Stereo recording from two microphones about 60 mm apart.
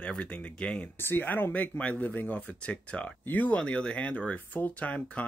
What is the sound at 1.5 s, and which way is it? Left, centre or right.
Speech, left.